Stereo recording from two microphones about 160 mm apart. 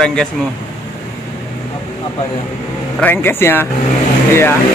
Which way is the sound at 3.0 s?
15° left (ahead or behind).